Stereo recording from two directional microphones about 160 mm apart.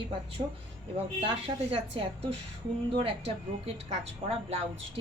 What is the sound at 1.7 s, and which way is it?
Speech, 35° right (ahead or behind).